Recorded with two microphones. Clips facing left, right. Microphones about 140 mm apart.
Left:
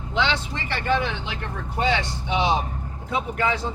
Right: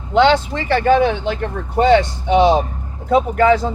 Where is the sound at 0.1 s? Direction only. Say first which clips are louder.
Right 12 dB; 50° right (ahead or behind).